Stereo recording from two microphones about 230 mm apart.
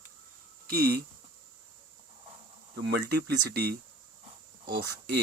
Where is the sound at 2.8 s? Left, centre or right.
Right.